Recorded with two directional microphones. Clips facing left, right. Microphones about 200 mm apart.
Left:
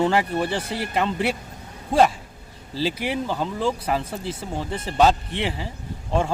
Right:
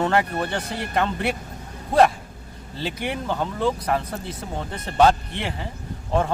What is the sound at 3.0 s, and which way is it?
Speech, centre (ahead or behind).